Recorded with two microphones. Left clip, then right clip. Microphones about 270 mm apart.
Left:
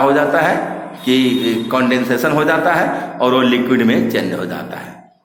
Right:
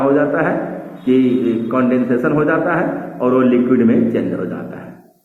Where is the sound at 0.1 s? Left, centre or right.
Left.